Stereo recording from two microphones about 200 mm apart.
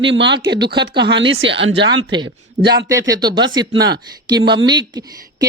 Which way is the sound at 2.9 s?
15° right (ahead or behind).